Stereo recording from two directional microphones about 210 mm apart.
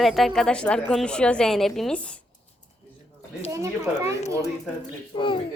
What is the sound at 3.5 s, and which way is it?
Speech, 15° right (ahead or behind).